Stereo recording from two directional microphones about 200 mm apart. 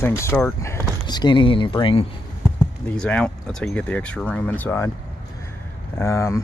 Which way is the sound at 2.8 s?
5° left (ahead or behind).